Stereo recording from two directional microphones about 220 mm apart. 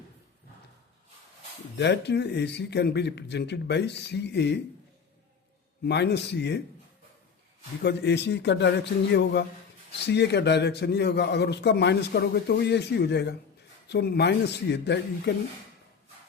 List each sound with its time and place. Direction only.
1.7 s a man's voice: 50° left (ahead or behind)
5.8 s a man's voice: 50° left (ahead or behind)
7.8 s a man's voice: 50° left (ahead or behind)